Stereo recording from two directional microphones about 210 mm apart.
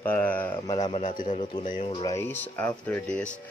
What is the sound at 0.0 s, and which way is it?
Speech, 10° left (ahead or behind).